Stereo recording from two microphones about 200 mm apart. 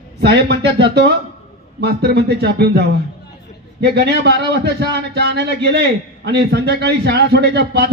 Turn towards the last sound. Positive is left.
turn(degrees=-55)  # may be behind; listen again after turning